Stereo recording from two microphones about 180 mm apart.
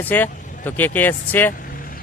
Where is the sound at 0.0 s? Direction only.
10° left (ahead or behind).